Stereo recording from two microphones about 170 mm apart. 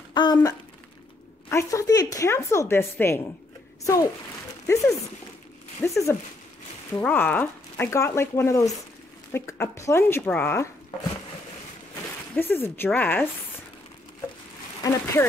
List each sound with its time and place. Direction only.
0.1 s speech: 25° left (ahead or behind)
5.8 s speech: 15° left (ahead or behind)
12.4 s speech: 10° left (ahead or behind)
14.8 s speech: 15° left (ahead or behind)